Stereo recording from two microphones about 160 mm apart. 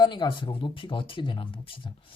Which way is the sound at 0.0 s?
30° left (ahead or behind).